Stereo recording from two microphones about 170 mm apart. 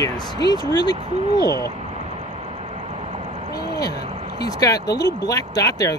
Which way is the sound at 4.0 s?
40° right (ahead or behind).